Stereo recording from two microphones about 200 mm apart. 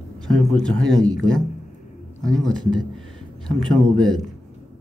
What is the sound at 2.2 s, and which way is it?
A man's voice, centre (ahead or behind).